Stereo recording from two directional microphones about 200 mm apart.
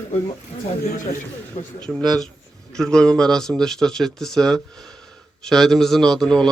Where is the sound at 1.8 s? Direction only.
5° left (ahead or behind).